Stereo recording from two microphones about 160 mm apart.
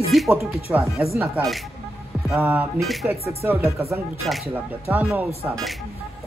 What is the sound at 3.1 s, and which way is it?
Speech, 15° right (ahead or behind).